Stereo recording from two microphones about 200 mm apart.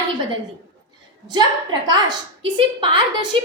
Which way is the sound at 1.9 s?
20° right (ahead or behind).